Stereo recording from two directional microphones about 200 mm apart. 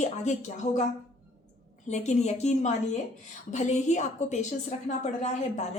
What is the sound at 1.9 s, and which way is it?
A woman's voice, 35° left (ahead or behind).